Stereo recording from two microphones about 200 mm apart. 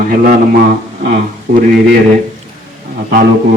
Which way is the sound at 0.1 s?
45° right (ahead or behind).